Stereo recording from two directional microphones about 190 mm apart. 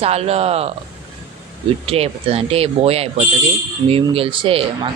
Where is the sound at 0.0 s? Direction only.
35° right (ahead or behind).